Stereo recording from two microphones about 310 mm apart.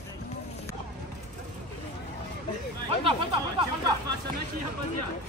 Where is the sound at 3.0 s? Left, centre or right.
Centre.